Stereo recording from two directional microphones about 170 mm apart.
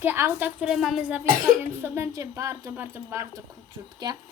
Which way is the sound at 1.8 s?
15° right (ahead or behind).